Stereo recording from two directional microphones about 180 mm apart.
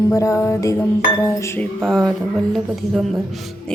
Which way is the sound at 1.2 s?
15° left (ahead or behind).